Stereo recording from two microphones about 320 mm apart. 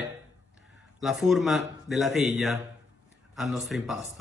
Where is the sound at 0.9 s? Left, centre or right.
Centre.